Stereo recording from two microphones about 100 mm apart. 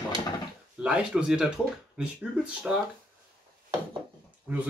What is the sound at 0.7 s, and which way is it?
Speech, 10° right (ahead or behind).